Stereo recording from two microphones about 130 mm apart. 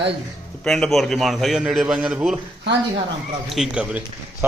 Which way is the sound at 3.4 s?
5° right (ahead or behind).